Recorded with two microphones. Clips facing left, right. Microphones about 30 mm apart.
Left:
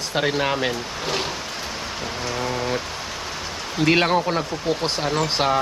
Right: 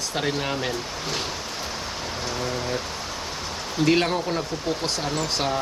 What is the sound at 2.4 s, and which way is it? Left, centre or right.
Rain, left.